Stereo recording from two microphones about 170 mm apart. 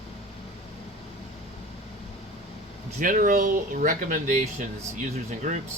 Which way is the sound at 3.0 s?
50° right (ahead or behind).